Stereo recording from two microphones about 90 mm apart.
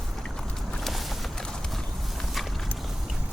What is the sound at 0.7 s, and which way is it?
Clip-clop, centre (ahead or behind).